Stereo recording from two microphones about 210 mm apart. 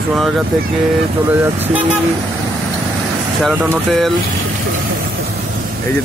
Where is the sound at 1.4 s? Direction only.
5° right (ahead or behind).